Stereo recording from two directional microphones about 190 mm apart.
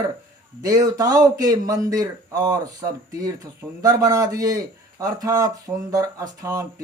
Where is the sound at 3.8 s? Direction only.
20° right (ahead or behind).